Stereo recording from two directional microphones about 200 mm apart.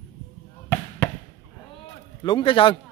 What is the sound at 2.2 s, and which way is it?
Speech, 25° left (ahead or behind).